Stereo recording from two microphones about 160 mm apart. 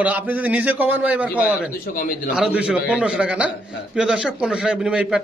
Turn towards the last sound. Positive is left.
turn(degrees=-5)  # may be behind; listen again after turning